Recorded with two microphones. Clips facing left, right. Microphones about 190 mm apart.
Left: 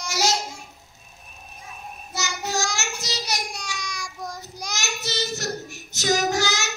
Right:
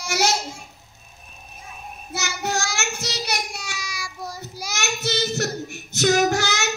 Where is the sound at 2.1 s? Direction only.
60° right (ahead or behind).